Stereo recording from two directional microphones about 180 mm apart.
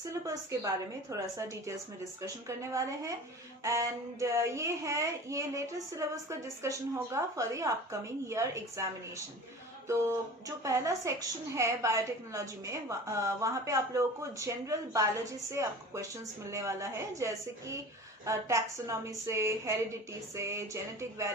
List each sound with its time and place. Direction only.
0.1 s a woman's voice: 15° right (ahead or behind)
10.6 s a woman's voice: 15° right (ahead or behind)